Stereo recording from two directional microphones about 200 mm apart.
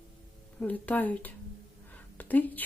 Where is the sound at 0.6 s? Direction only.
10° left (ahead or behind).